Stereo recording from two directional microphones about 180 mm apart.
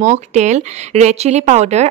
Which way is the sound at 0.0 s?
40° right (ahead or behind).